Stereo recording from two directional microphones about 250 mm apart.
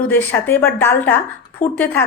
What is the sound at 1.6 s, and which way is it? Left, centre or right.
Speech, left.